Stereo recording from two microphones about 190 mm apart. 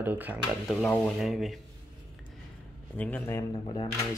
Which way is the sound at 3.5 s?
25° left (ahead or behind).